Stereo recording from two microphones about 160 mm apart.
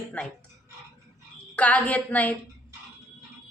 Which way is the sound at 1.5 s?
10° left (ahead or behind).